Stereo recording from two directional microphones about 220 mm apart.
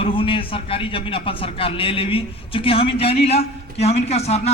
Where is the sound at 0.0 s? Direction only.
25° left (ahead or behind).